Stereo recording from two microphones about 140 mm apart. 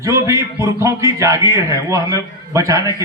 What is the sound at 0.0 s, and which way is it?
A man's voice, 20° right (ahead or behind).